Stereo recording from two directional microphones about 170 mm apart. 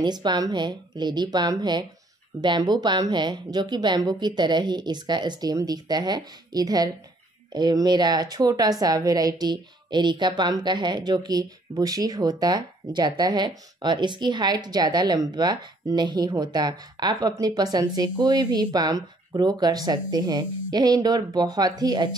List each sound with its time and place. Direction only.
0.0 s a woman's voice: 25° right (ahead or behind)